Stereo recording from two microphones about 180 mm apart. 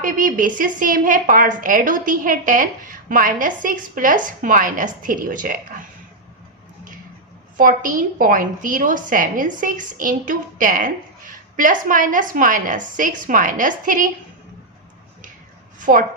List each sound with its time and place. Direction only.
0.0 s a woman's voice: 50° right (ahead or behind)
7.5 s a woman's voice: 50° right (ahead or behind)
15.8 s a woman's voice: 50° right (ahead or behind)